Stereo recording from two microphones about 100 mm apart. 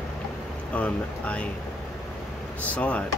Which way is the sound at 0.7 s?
15° left (ahead or behind).